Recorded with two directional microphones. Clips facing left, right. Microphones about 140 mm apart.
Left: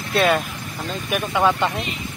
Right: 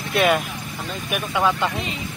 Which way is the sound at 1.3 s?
5° left (ahead or behind).